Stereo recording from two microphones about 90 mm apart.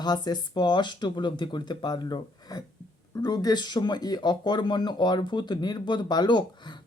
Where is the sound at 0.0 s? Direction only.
50° left (ahead or behind).